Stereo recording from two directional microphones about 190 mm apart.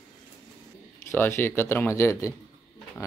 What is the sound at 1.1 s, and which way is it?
Speech, 10° left (ahead or behind).